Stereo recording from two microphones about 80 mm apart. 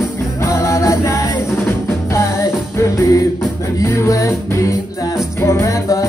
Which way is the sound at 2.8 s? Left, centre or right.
Left.